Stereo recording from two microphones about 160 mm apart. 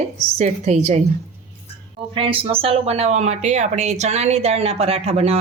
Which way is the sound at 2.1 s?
35° right (ahead or behind).